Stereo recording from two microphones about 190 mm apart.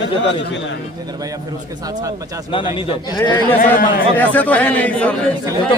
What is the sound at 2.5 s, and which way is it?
Speech, 25° left (ahead or behind).